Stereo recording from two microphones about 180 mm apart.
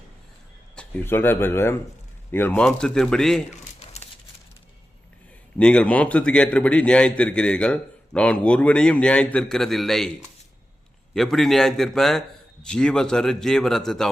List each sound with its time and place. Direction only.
0.8 s a man's voice: 10° left (ahead or behind)
3.5 s a sound: 40° left (ahead or behind)
5.5 s a man's voice: 5° left (ahead or behind)
11.1 s a man's voice: centre (ahead or behind)